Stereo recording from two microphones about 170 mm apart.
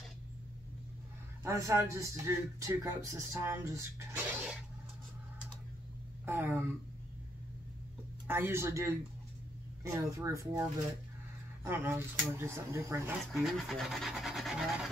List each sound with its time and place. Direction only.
1.4 s a man's voice: 20° right (ahead or behind)
6.2 s a man's voice: 10° right (ahead or behind)
8.3 s a man's voice: 15° right (ahead or behind)
11.6 s a man's voice: 15° right (ahead or behind)
13.2 s rub: centre (ahead or behind)